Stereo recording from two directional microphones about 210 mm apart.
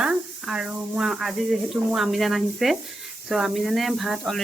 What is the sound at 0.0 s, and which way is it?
Speech, 5° right (ahead or behind).